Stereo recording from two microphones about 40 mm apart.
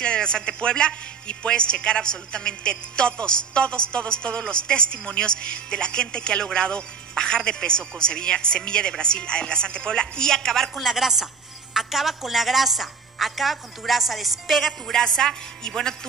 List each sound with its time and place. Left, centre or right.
0.0 s a woman's voice: left; by 11.0 s centre
11.0 s a woman's voice: centre
14.9 s speech: centre